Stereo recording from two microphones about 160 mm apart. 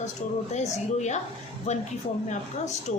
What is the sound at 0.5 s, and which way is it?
A woman's voice, 45° left (ahead or behind).